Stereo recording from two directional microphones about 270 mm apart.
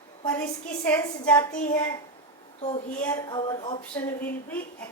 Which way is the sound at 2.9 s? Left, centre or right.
Centre.